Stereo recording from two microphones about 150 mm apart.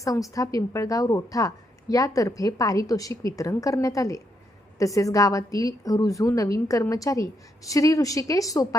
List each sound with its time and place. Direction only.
0.0 s a woman's voice: 20° left (ahead or behind)